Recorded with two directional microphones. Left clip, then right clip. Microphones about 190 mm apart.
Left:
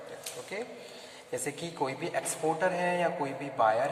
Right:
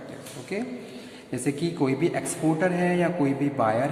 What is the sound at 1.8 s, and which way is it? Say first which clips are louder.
A man's voice: right 6 dB; 20° right (ahead or behind).